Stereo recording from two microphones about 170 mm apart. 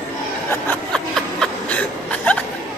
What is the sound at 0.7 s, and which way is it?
Snicker, 5° left (ahead or behind).